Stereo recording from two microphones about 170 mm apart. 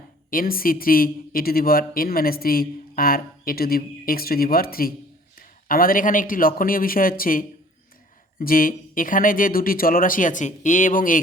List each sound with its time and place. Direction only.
0.3 s speech: 55° left (ahead or behind)